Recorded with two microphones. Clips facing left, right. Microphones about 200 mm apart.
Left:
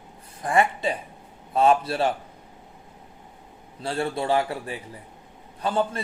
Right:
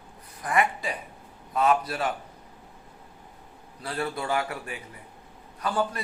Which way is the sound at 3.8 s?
25° left (ahead or behind).